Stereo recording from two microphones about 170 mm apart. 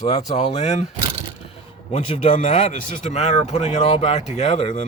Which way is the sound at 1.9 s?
40° left (ahead or behind).